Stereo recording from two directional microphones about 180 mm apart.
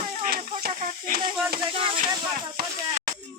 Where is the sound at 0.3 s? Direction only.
55° right (ahead or behind).